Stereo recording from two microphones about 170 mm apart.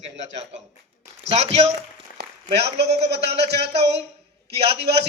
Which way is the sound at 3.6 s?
40° right (ahead or behind).